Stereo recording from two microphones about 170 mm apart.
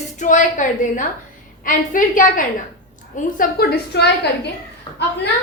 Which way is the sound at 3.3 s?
70° left (ahead or behind).